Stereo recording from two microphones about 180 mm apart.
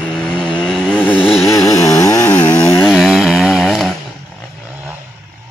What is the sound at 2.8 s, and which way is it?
Chainsaw, centre (ahead or behind).